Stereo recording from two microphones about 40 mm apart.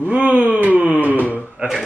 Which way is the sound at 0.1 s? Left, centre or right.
Right.